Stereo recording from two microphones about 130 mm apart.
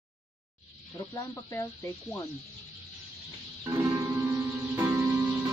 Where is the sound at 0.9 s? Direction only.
25° left (ahead or behind).